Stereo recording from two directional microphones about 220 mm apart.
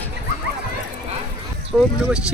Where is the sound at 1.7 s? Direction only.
5° right (ahead or behind).